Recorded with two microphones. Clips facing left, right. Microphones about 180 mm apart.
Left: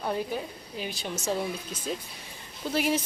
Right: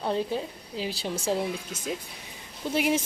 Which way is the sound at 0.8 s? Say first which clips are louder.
Right 3 dB; 30° right (ahead or behind).